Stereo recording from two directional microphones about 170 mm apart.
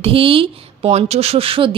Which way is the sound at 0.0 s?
30° right (ahead or behind).